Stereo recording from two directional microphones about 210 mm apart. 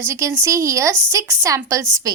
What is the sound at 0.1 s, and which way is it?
A woman's voice, 15° right (ahead or behind).